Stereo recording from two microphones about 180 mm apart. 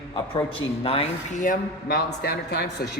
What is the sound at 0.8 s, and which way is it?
Speech, 30° left (ahead or behind).